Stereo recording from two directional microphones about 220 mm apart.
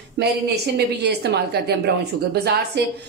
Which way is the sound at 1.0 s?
50° right (ahead or behind).